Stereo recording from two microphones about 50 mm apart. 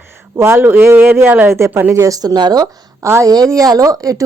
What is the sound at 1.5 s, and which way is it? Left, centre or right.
Speech, right.